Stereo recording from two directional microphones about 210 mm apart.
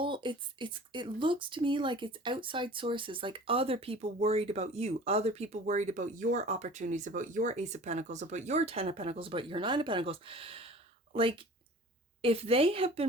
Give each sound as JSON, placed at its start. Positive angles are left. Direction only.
{"t": 0.0, "sound": "speech", "side_deg": -25}